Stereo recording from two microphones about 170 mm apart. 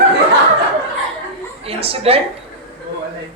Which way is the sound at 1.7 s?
35° right (ahead or behind).